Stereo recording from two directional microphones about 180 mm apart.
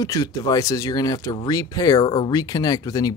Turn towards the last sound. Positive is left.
turn(degrees=20)  # may be behind; listen again after turning